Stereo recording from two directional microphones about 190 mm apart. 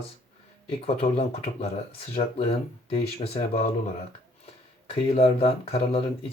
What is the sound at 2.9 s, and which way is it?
Speech, 30° left (ahead or behind).